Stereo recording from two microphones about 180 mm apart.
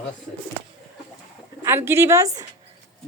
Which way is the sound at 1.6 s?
15° right (ahead or behind).